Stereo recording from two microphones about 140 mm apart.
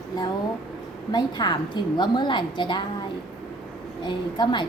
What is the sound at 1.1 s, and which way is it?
A woman's voice, 30° left (ahead or behind).